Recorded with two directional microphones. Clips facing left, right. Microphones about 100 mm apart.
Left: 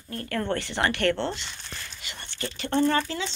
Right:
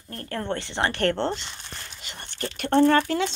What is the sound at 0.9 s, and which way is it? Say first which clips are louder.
Speech: right 3 dB; 40° right (ahead or behind).